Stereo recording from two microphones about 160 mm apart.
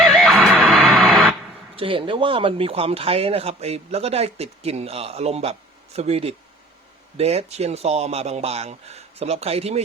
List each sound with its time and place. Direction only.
0.0 s music: centre (ahead or behind)
1.7 s speech: 35° right (ahead or behind)